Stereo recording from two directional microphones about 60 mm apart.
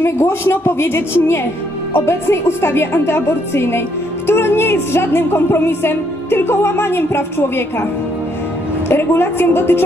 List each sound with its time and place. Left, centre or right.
0.0 s a woman's voice: left
8.8 s a woman's voice: left